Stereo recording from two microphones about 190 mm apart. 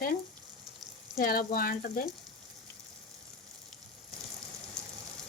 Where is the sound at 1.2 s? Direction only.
50° left (ahead or behind).